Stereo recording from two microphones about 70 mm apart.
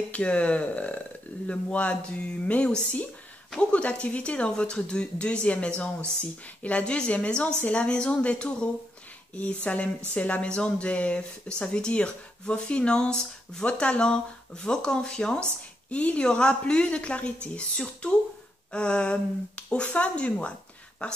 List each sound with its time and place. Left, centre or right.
0.1 s speech: centre